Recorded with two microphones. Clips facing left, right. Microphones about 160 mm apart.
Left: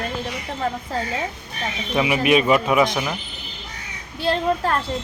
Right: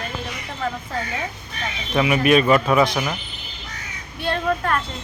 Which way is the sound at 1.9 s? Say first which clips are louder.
Right 1 dB; 15° left (ahead or behind).